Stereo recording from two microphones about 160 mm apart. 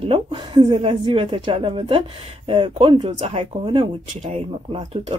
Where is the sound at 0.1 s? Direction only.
35° right (ahead or behind).